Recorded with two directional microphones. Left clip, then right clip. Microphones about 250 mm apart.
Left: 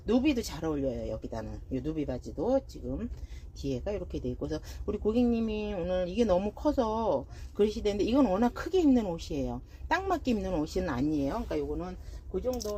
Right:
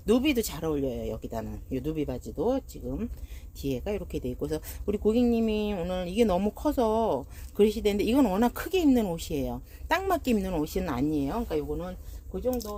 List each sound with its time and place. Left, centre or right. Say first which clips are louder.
0.0 s speech: right 3 dB; right
3.6 s speech: right 2 dB; right